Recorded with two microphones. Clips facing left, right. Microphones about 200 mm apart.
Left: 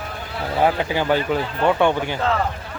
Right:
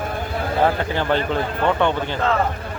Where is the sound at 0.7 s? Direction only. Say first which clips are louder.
Left 1 dB; 10° left (ahead or behind).